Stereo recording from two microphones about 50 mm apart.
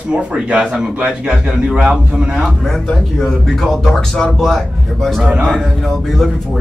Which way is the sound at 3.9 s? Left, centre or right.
Centre.